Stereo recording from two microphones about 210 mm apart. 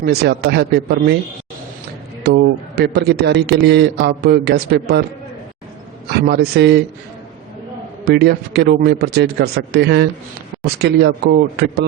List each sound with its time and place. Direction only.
0.0 s a man's voice: 50° right (ahead or behind)
2.2 s a man's voice: 50° right (ahead or behind)
6.1 s a man's voice: 50° right (ahead or behind)
8.0 s a man's voice: 50° right (ahead or behind)